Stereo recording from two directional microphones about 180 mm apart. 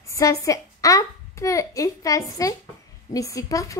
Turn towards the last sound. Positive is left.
turn(degrees=20)  # may be behind; listen again after turning